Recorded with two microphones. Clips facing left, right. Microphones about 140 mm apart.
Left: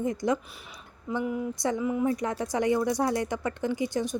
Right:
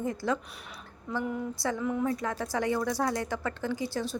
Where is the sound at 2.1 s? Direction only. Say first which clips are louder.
Left 3 dB; 20° left (ahead or behind).